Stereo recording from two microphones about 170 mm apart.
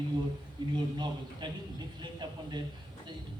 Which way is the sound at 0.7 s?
25° right (ahead or behind).